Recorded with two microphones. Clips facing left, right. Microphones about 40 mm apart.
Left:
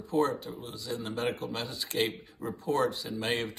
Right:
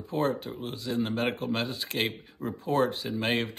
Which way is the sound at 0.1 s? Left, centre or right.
Right.